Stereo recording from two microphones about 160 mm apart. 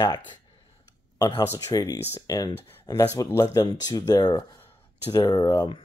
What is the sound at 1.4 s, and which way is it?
Speech, 20° left (ahead or behind).